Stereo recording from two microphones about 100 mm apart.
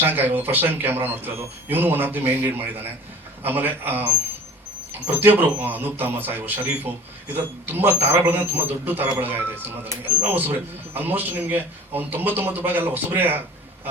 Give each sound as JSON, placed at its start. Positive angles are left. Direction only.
{"t": 0.0, "sound": "a man's voice", "side_deg": -20}
{"t": 5.2, "sound": "a man's voice", "side_deg": -20}